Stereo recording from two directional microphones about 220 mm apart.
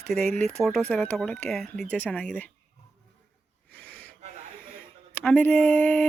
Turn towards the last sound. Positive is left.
turn(degrees=10)  # may be behind; listen again after turning